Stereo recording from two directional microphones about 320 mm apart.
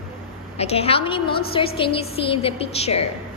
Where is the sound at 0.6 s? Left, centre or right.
Centre.